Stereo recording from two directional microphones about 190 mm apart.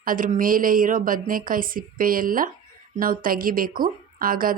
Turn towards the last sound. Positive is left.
turn(degrees=-50)  # may be behind; listen again after turning